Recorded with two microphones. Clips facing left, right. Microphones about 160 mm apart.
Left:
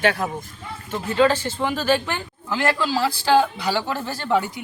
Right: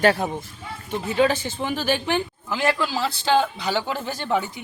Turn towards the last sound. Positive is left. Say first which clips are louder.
# left 2 dB
turn(degrees=-15)  # may be behind; listen again after turning